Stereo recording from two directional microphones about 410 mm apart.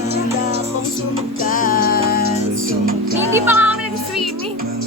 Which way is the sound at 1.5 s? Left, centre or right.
Left.